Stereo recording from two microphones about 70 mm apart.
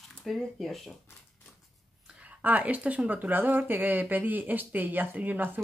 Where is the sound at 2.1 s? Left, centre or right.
Right.